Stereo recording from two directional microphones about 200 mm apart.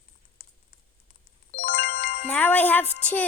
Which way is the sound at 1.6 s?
45° left (ahead or behind).